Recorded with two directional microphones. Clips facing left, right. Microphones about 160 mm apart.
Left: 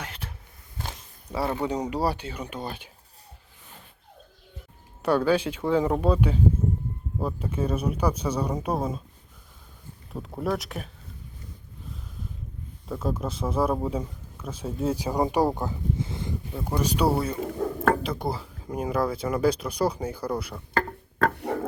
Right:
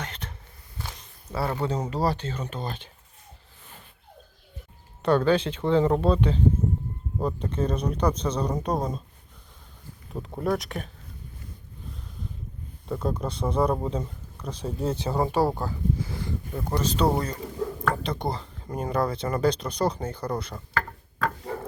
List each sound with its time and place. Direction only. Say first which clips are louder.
0.0 s a sound: right 1 dB; 5° left (ahead or behind)
0.8 s speech: left 2 dB; 15° left (ahead or behind)
5.0 s speech: right 1 dB; 10° left (ahead or behind)
10.1 s speech: right 1 dB; centre (ahead or behind)
12.9 s speech: right 1 dB; 5° left (ahead or behind); by 16.3 s 20° left (ahead or behind)
16.6 s speech: even; 10° left (ahead or behind)
21.2 s a sound: left 4 dB; 60° left (ahead or behind)